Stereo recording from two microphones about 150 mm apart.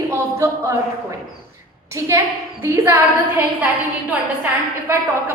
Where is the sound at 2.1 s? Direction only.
20° right (ahead or behind).